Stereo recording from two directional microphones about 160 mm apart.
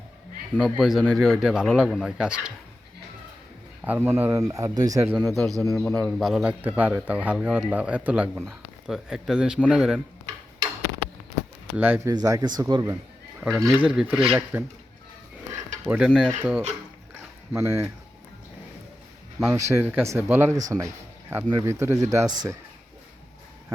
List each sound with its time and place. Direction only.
0.5 s a man's voice: centre (ahead or behind)
3.8 s speech: 10° right (ahead or behind)
5.4 s a man's voice: centre (ahead or behind)
11.8 s speech: 15° right (ahead or behind)
12.1 s speech: 25° right (ahead or behind)
13.4 s a man's voice: centre (ahead or behind)
15.9 s a man's voice: 5° right (ahead or behind)
17.5 s speech: 15° right (ahead or behind)
19.5 s speech: 15° right (ahead or behind)